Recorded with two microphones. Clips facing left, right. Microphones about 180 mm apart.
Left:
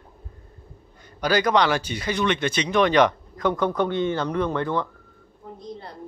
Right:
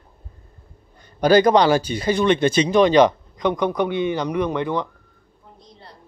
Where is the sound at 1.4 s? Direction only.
35° right (ahead or behind); by 4.9 s 15° right (ahead or behind).